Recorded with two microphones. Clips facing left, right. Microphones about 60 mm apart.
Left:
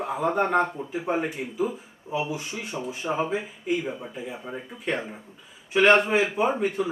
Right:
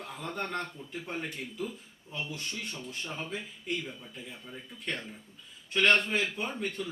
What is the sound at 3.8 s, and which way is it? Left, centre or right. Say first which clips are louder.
Speech: left 11 dB; left.